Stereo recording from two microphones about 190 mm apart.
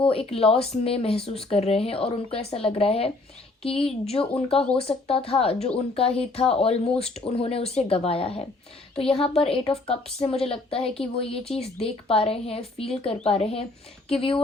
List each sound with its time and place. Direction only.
0.0 s speech: 30° left (ahead or behind)
3.7 s a woman's voice: 5° left (ahead or behind)
4.0 s speech: 30° left (ahead or behind)